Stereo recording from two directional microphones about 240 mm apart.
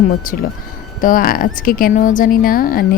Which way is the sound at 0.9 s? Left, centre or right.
Left.